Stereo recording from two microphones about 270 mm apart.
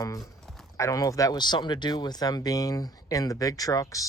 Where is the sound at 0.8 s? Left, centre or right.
Centre.